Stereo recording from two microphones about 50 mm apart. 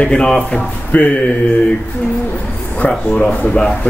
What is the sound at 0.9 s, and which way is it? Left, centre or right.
Speech, left.